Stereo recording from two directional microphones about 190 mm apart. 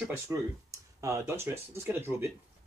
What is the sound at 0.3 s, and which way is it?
Speech, 15° right (ahead or behind).